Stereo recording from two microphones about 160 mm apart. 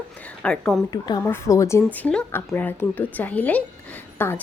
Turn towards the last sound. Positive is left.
turn(degrees=10)  # may be behind; listen again after turning